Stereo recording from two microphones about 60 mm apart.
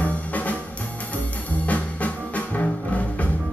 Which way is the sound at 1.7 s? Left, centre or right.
Left.